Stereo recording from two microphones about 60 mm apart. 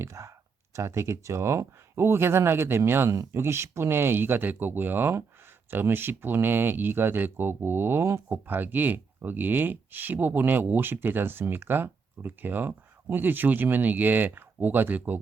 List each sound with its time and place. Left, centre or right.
0.0 s speech: right